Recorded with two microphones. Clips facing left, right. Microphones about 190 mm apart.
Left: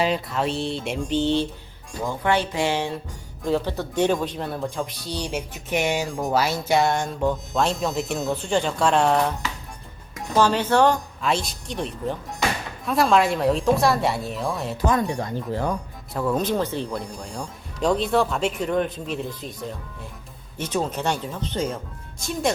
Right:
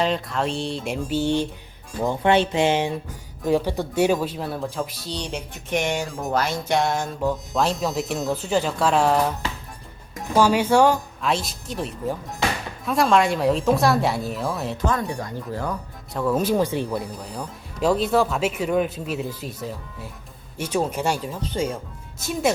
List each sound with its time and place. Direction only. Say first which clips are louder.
0.0 s speech: even; 5° left (ahead or behind)
2.0 s music: right 4 dB; 25° right (ahead or behind)
3.4 s speech: right 2 dB; 15° right (ahead or behind)
10.3 s speech: right 2 dB; 10° right (ahead or behind)
14.8 s speech: left 4 dB; 25° left (ahead or behind)
16.1 s speech: right 2 dB; 5° right (ahead or behind)